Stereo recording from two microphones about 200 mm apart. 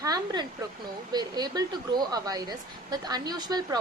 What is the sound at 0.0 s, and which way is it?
Speech, 20° right (ahead or behind).